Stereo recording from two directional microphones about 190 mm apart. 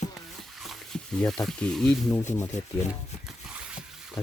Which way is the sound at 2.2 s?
40° left (ahead or behind).